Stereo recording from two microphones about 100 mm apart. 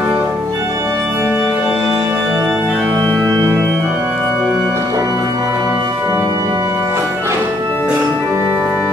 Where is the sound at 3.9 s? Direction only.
5° right (ahead or behind).